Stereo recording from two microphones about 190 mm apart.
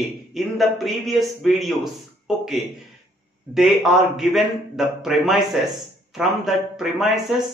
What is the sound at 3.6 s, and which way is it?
A man's voice, centre (ahead or behind).